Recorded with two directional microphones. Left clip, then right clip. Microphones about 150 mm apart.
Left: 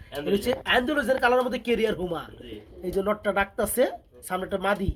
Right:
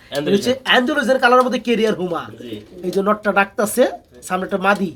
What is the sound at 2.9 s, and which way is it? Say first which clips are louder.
Speech: right 8 dB; 15° left (ahead or behind).